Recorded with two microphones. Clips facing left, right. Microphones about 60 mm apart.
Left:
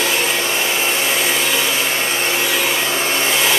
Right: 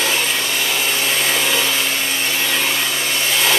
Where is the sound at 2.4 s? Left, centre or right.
Centre.